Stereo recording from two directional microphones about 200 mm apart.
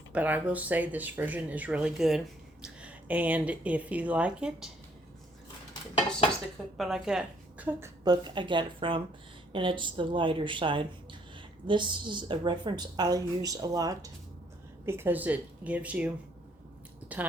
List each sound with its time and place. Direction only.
0.1 s speech: 10° right (ahead or behind)
6.7 s a woman's voice: centre (ahead or behind)
8.0 s speech: 20° right (ahead or behind)